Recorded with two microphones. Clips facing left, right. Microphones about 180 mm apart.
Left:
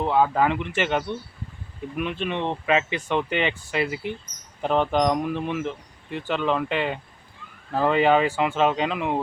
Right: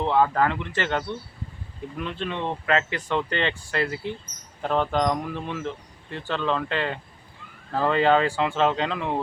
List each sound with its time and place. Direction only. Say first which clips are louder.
0.0 s speech: left 1 dB; 10° left (ahead or behind)